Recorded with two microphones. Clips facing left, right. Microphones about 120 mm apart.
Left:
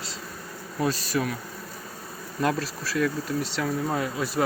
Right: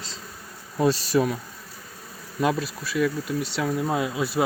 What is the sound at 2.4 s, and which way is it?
Speech, 15° right (ahead or behind).